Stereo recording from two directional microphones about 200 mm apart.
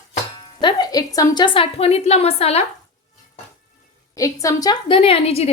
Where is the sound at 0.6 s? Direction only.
20° left (ahead or behind).